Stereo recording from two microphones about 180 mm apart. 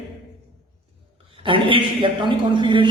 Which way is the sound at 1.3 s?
30° right (ahead or behind).